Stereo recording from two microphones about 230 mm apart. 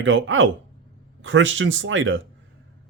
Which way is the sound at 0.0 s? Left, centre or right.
Right.